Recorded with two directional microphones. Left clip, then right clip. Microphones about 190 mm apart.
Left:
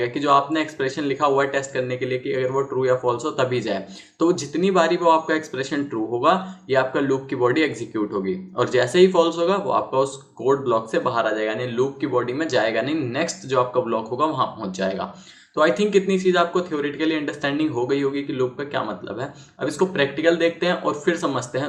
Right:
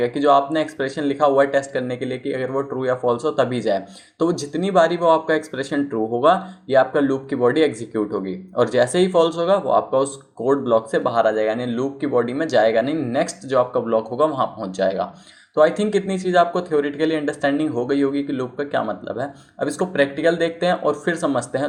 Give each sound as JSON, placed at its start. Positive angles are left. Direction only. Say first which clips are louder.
{"t": 0.0, "sound": "speech", "louder": "right 2 dB", "side_deg": -35}